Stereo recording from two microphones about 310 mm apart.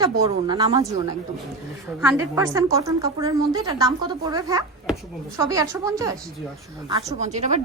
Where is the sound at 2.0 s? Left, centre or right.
Centre.